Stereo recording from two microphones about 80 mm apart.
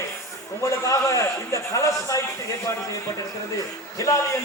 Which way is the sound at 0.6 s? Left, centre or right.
Left.